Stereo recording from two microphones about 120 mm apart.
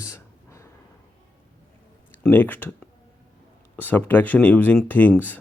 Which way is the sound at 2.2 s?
15° left (ahead or behind).